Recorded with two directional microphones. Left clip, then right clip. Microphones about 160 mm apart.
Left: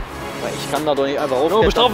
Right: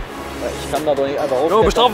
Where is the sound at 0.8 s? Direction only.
65° left (ahead or behind).